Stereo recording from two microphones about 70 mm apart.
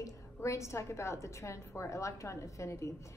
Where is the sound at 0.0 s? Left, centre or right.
Left.